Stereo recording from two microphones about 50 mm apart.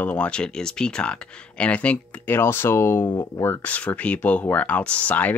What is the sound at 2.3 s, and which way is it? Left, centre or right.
Speech, left.